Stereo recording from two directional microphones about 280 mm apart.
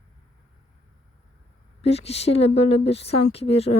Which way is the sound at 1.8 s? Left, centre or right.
Left.